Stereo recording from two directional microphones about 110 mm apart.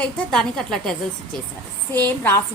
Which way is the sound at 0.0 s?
5° left (ahead or behind).